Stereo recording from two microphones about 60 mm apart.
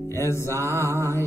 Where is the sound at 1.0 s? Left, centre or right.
Right.